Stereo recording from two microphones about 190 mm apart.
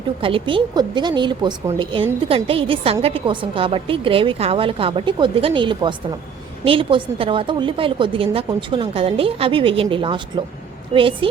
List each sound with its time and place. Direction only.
0.2 s a woman's voice: 30° right (ahead or behind)